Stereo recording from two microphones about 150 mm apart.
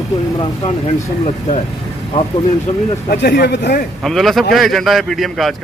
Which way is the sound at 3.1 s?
90° left.